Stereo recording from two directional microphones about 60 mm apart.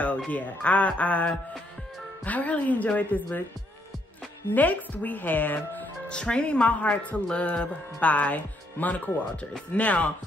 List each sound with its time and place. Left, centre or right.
0.3 s speech: left
4.6 s speech: left
6.0 s speech: centre